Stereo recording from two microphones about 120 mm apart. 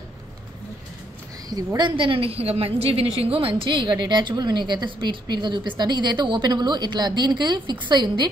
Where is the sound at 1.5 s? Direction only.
30° right (ahead or behind).